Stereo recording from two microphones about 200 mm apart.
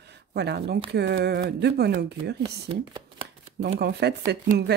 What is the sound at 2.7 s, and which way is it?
Speech, 30° right (ahead or behind).